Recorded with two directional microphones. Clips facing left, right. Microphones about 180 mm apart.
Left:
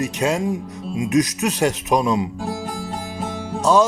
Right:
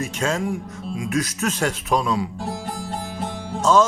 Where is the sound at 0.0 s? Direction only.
15° left (ahead or behind).